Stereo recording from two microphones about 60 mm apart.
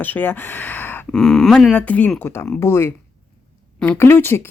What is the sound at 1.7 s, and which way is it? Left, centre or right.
Speech, left.